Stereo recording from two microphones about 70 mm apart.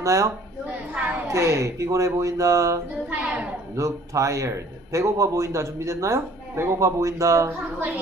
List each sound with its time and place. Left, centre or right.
0.0 s a woman's voice: right
1.3 s a man's voice: right
3.1 s a woman's voice: right
3.7 s a man's voice: right